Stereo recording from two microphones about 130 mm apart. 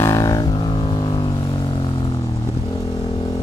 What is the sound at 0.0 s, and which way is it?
Vehicle, 25° left (ahead or behind).